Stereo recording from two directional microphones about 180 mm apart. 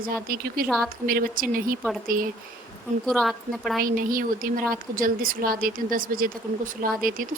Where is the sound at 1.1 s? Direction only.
55° right (ahead or behind).